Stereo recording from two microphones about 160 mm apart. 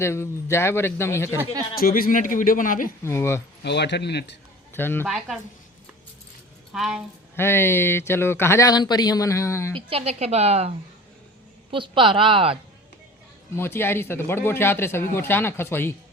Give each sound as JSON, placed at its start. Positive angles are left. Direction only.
{"t": 0.0, "sound": "speech", "side_deg": 15}
{"t": 1.8, "sound": "a man's voice", "side_deg": 65}
{"t": 3.0, "sound": "speech", "side_deg": 15}
{"t": 3.6, "sound": "speech", "side_deg": 90}
{"t": 4.7, "sound": "speech", "side_deg": 15}
{"t": 5.0, "sound": "speech", "side_deg": 0}
{"t": 6.7, "sound": "speech", "side_deg": 0}
{"t": 7.3, "sound": "speech", "side_deg": 15}
{"t": 9.7, "sound": "a woman's voice", "side_deg": -40}
{"t": 11.7, "sound": "a woman's voice", "side_deg": -30}
{"t": 13.6, "sound": "speech", "side_deg": 15}